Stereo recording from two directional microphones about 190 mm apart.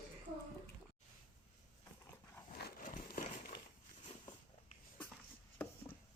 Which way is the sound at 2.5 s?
50° left (ahead or behind).